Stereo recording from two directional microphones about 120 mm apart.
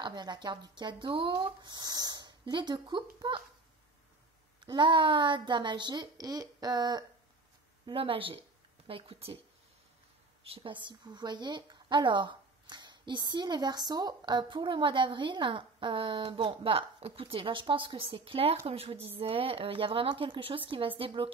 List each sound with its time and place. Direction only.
0.0 s speech: 35° right (ahead or behind)
4.6 s speech: 40° right (ahead or behind)
7.8 s a woman's voice: 50° right (ahead or behind)
10.4 s a woman's voice: 50° right (ahead or behind)